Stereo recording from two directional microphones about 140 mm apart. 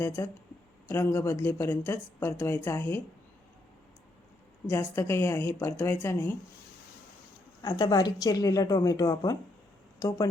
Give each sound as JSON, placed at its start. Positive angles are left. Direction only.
{"t": 0.2, "sound": "a woman's voice", "side_deg": 20}
{"t": 4.7, "sound": "speech", "side_deg": 20}
{"t": 7.6, "sound": "a woman's voice", "side_deg": 30}